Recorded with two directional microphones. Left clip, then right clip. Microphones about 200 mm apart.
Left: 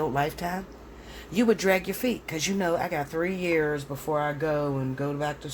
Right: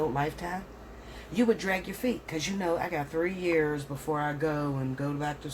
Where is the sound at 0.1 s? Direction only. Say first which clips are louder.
Left 4 dB; 55° left (ahead or behind).